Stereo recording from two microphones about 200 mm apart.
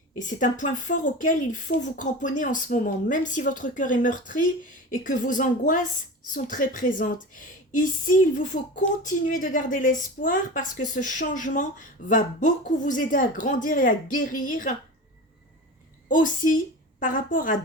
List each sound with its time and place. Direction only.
0.3 s speech: 40° left (ahead or behind)
16.0 s speech: 40° left (ahead or behind)